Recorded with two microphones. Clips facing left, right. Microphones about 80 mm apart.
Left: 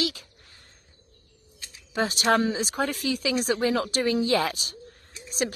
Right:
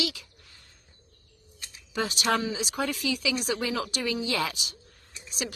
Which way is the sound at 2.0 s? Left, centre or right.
Left.